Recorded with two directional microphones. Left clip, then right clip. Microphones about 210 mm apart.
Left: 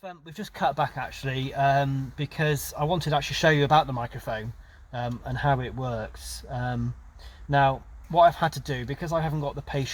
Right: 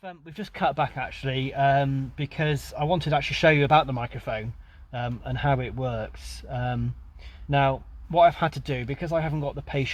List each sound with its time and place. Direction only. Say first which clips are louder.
0.0 s speech: right 1 dB; 25° right (ahead or behind)